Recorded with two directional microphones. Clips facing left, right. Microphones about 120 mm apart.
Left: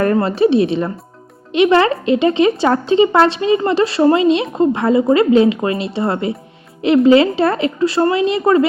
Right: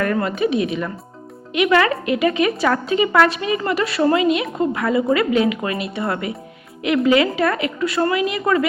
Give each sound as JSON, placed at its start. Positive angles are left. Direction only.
{"t": 0.0, "sound": "a woman's voice", "side_deg": 30}